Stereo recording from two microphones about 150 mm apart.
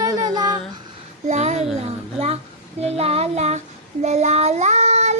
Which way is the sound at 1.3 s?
50° right (ahead or behind).